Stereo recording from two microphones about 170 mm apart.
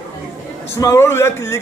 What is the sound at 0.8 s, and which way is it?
Speech, 15° left (ahead or behind).